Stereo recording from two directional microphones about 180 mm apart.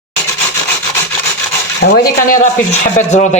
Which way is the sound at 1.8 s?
90° left.